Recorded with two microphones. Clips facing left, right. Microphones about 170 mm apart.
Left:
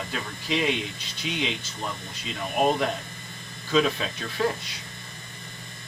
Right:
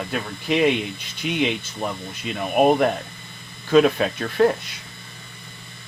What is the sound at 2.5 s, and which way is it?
Speech, 55° right (ahead or behind).